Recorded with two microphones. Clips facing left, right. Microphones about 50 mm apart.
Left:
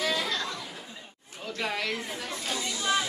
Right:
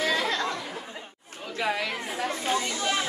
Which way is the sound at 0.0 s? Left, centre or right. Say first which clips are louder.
Right 3 dB; right.